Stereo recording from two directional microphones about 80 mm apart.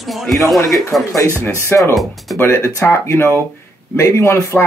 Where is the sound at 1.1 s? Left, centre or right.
Left.